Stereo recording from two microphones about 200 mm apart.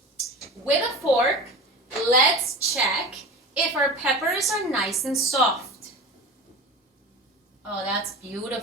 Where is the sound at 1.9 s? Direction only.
Centre (ahead or behind).